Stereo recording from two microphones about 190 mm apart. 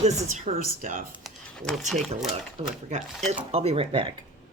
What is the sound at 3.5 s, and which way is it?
Speech, 30° right (ahead or behind).